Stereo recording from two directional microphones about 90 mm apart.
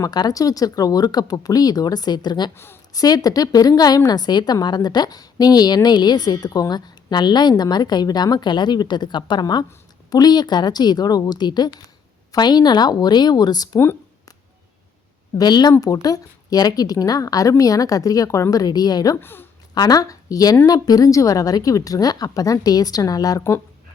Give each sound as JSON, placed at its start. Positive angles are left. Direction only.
{"t": 0.0, "sound": "a woman's voice", "side_deg": 45}
{"t": 15.4, "sound": "a woman's voice", "side_deg": 50}
{"t": 19.1, "sound": "speech", "side_deg": 25}
{"t": 19.7, "sound": "a woman's voice", "side_deg": 45}